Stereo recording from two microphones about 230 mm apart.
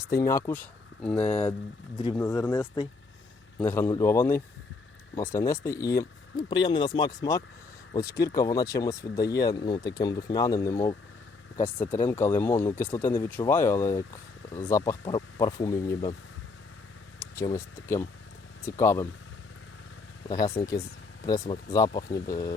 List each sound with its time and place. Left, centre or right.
0.2 s speech: centre
1.2 s speech: left
2.0 s speech: centre
17.2 s speech: centre
20.5 s speech: centre